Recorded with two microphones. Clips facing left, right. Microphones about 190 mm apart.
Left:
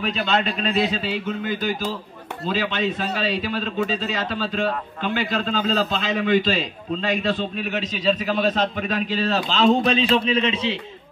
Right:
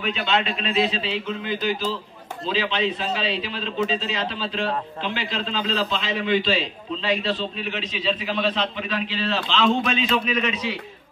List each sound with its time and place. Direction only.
0.0 s a man's voice: 40° left (ahead or behind)